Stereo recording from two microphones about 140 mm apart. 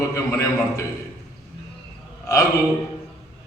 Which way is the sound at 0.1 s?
20° left (ahead or behind).